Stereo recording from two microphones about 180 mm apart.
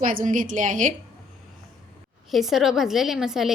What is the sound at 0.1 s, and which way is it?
Speech, 50° right (ahead or behind).